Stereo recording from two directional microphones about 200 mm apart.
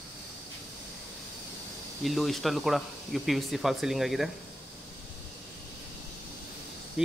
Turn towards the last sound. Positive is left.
turn(degrees=-5)  # may be behind; listen again after turning